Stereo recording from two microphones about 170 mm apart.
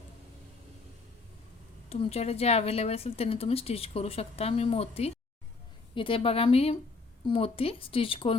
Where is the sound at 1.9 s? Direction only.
35° left (ahead or behind).